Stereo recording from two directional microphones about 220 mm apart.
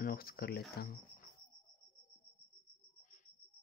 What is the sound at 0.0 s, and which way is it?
Speech, 40° left (ahead or behind).